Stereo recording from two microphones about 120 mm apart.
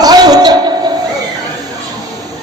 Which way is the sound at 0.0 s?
35° right (ahead or behind).